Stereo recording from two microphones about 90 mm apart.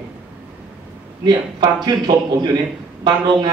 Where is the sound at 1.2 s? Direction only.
55° right (ahead or behind).